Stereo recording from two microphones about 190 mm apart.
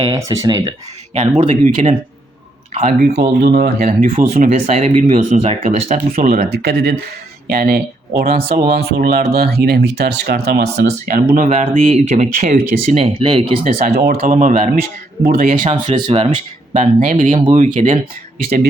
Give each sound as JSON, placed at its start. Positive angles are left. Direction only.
{"t": 0.0, "sound": "speech", "side_deg": -20}
{"t": 3.2, "sound": "speech", "side_deg": -55}
{"t": 11.3, "sound": "speech", "side_deg": -35}
{"t": 13.7, "sound": "speech", "side_deg": -50}
{"t": 15.2, "sound": "speech", "side_deg": -50}
{"t": 16.0, "sound": "speech", "side_deg": -30}
{"t": 18.4, "sound": "speech", "side_deg": -50}